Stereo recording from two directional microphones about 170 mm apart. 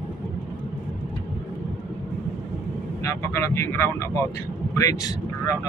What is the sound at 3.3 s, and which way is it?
Speech, 15° left (ahead or behind).